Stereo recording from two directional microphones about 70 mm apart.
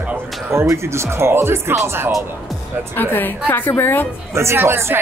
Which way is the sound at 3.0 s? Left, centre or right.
Left.